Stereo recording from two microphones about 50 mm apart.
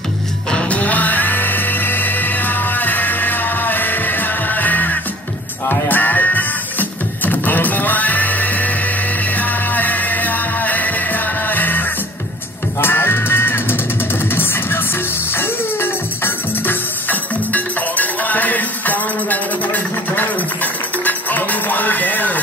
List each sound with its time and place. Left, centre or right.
0.5 s music: left
12.8 s music: left